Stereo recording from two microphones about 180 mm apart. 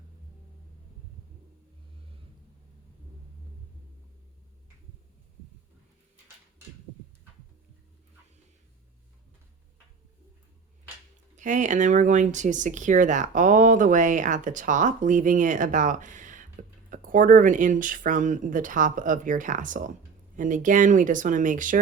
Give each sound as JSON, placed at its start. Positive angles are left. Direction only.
{"t": 11.3, "sound": "speech", "side_deg": -45}